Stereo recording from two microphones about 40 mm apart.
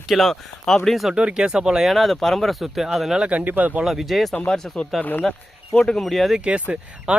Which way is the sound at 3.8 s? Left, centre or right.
Centre.